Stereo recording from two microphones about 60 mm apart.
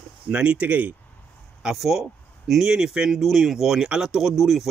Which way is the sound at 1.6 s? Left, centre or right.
Centre.